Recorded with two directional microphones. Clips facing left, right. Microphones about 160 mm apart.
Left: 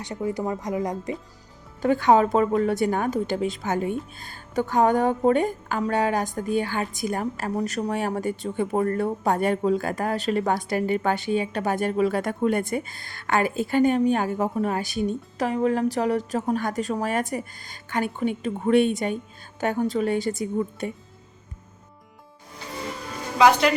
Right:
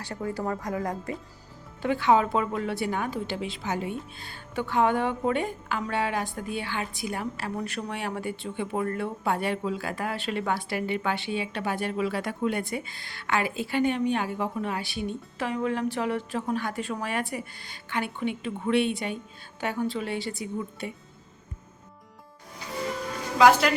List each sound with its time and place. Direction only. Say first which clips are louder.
0.0 s speech: left 4 dB; 15° left (ahead or behind)
1.8 s a woman's voice: left 4 dB; 45° left (ahead or behind)
23.4 s speech: left 1 dB; centre (ahead or behind)